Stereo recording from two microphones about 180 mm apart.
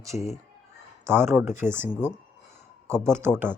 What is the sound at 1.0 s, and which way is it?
Speech, 15° right (ahead or behind).